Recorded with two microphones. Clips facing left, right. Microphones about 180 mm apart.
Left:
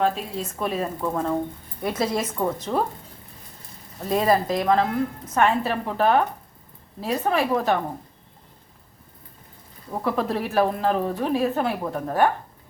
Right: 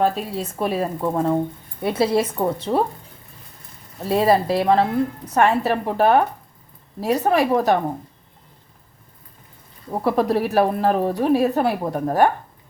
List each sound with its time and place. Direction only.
0.0 s a woman's voice: 35° right (ahead or behind)
4.1 s speech: 30° right (ahead or behind)
5.3 s a woman's voice: 45° right (ahead or behind)
10.0 s a woman's voice: 40° right (ahead or behind)